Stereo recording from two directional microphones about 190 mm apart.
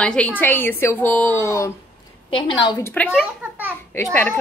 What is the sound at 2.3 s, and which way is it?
Speech, 25° left (ahead or behind).